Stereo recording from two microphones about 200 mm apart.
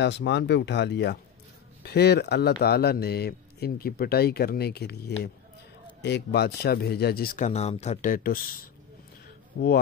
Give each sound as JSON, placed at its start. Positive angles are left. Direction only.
{"t": 0.0, "sound": "speech", "side_deg": 60}